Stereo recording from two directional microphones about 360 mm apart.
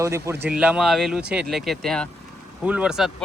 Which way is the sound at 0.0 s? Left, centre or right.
Centre.